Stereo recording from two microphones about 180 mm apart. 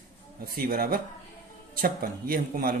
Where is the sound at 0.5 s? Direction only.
55° right (ahead or behind).